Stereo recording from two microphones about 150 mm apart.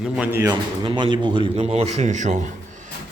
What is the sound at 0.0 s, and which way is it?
Speech, 10° right (ahead or behind).